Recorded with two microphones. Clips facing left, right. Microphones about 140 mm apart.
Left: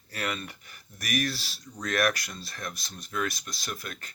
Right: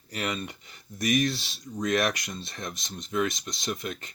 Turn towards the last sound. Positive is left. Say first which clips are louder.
# right 6 dB
turn(degrees=-20)  # may be behind; listen again after turning